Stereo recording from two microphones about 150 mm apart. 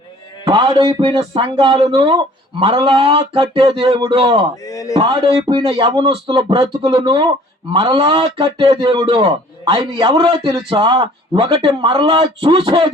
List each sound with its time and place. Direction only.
0.4 s speech: 30° right (ahead or behind)
4.6 s a sound: 25° left (ahead or behind)
4.9 s speech: 30° right (ahead or behind)